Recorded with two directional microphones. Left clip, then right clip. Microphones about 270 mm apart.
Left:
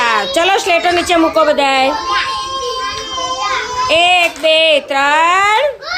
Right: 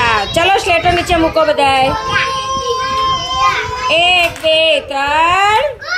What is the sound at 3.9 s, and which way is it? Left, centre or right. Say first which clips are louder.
A woman's voice: even; centre.